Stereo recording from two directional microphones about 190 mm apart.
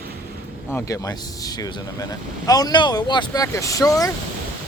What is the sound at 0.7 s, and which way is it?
Speech, 15° left (ahead or behind).